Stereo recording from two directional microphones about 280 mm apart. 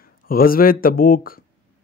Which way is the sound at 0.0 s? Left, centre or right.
Left.